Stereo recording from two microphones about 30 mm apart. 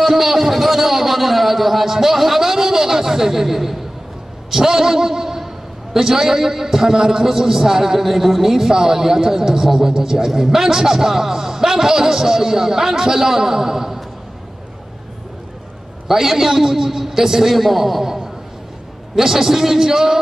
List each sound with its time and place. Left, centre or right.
0.0 s a sound: centre
4.5 s a man's voice: centre
16.1 s a man's voice: centre
18.0 s a man's voice: centre